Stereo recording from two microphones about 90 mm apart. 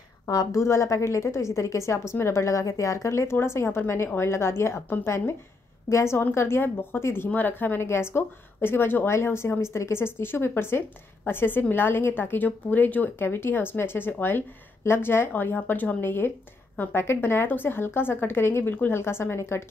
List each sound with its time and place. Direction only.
0.3 s a woman's voice: 40° left (ahead or behind)